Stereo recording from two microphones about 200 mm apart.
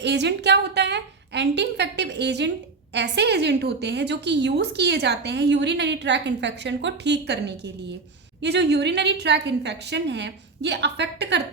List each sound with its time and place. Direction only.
0.0 s a woman's voice: 60° right (ahead or behind)